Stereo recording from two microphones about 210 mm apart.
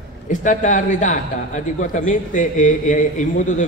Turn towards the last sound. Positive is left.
turn(degrees=35)  # may be behind; listen again after turning